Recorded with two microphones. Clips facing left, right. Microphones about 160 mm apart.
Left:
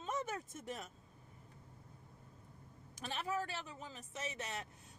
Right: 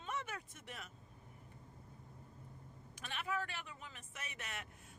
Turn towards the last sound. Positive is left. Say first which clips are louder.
# left 6 dB
turn(degrees=25)  # may be behind; listen again after turning